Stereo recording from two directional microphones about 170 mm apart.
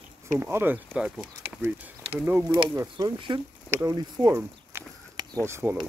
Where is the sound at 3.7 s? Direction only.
20° right (ahead or behind).